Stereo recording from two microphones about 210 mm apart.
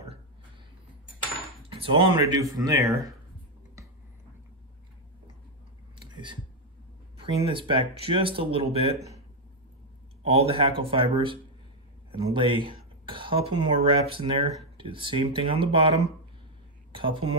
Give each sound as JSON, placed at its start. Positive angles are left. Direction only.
{"t": 1.7, "sound": "speech", "side_deg": -25}
{"t": 7.2, "sound": "speech", "side_deg": -25}
{"t": 10.2, "sound": "speech", "side_deg": -25}
{"t": 17.0, "sound": "speech", "side_deg": -25}